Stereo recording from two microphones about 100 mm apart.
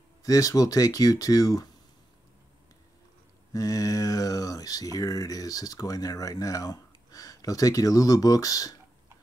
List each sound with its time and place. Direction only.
0.2 s speech: 35° left (ahead or behind)
3.5 s a sound: 35° left (ahead or behind)
4.9 s speech: 35° left (ahead or behind)